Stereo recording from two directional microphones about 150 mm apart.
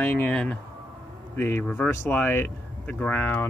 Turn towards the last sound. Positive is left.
turn(degrees=15)  # may be behind; listen again after turning